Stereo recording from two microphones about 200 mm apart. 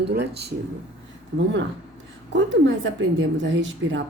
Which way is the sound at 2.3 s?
70° right (ahead or behind).